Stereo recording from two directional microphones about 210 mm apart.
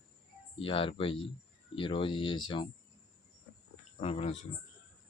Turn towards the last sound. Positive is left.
turn(degrees=30)  # may be behind; listen again after turning